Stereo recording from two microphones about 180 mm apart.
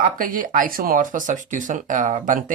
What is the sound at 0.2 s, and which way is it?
Speech, 50° right (ahead or behind).